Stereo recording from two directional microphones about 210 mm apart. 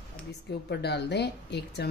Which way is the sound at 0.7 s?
50° left (ahead or behind).